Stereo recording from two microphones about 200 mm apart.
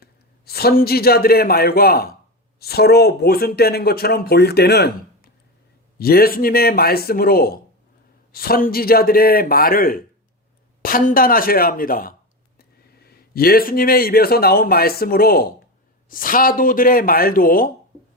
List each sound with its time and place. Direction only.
0.0 s a man's voice: 50° left (ahead or behind)